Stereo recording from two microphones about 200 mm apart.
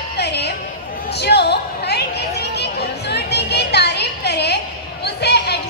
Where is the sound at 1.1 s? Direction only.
55° left (ahead or behind).